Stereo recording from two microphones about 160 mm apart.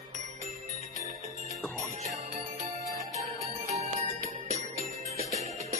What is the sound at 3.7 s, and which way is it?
Music, 40° right (ahead or behind).